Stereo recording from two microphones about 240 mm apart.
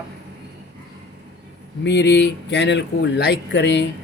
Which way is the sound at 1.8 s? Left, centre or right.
Left.